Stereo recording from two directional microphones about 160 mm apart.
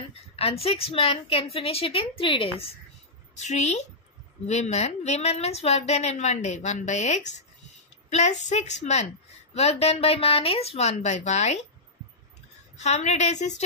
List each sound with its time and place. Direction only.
0.1 s a woman's voice: 35° left (ahead or behind)
3.3 s a woman's voice: 45° left (ahead or behind)
12.7 s a woman's voice: 45° left (ahead or behind)